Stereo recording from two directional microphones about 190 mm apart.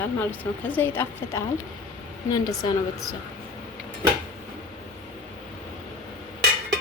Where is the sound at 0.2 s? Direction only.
10° left (ahead or behind).